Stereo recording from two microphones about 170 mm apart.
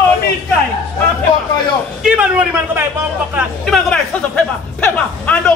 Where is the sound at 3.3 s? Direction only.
5° left (ahead or behind).